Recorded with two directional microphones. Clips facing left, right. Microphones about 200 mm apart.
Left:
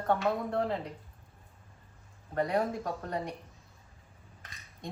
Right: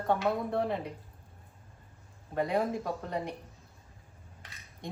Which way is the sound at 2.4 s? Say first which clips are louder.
Even; 5° right (ahead or behind).